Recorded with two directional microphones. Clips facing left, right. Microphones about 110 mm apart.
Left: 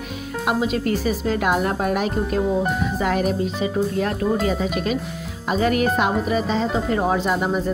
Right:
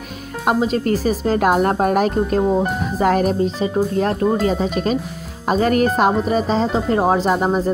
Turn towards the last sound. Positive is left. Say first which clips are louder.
# right 4 dB
turn(degrees=-35)  # may be behind; listen again after turning